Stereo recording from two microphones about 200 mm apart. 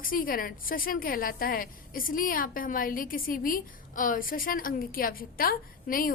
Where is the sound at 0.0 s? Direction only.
45° left (ahead or behind).